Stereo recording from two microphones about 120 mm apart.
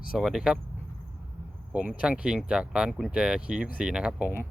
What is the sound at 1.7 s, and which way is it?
Speech, 10° right (ahead or behind).